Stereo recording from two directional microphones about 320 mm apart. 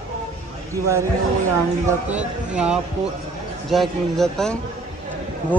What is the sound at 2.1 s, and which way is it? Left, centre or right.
Speech, centre.